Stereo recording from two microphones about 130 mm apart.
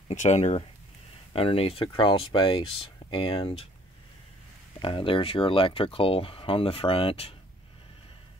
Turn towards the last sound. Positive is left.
turn(degrees=45)  # may be behind; listen again after turning